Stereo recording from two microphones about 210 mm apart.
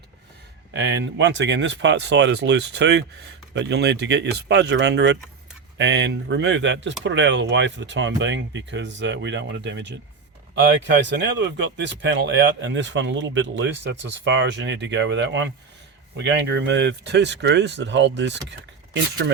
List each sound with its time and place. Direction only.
0.7 s speech: 60° right (ahead or behind)
11.0 s speech: 60° right (ahead or behind)